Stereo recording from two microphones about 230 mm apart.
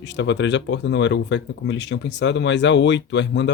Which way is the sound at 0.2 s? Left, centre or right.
Left.